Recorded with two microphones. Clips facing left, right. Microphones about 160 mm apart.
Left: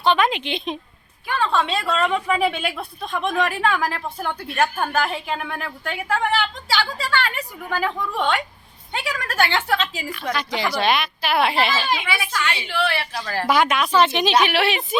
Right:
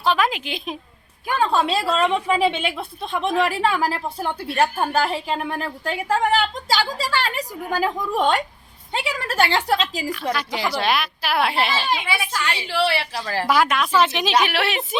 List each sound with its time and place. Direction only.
0.0 s a woman's voice: centre (ahead or behind)
1.3 s speech: 40° right (ahead or behind)
8.9 s speech: 30° right (ahead or behind)
10.3 s a woman's voice: 5° right (ahead or behind)
11.7 s speech: 30° right (ahead or behind)
13.5 s a woman's voice: centre (ahead or behind)